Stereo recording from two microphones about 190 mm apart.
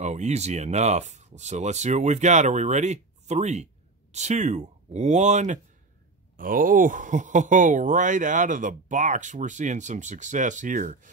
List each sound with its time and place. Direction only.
0.0 s speech: 35° right (ahead or behind)